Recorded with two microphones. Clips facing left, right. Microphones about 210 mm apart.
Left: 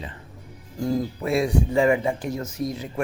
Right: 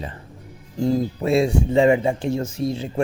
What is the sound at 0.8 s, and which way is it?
Speech, 25° right (ahead or behind).